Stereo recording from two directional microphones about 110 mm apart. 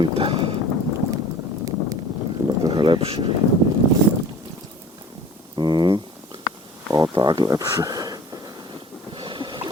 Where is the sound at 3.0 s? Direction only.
60° right (ahead or behind).